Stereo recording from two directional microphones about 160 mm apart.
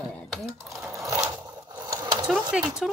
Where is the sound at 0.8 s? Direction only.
20° right (ahead or behind).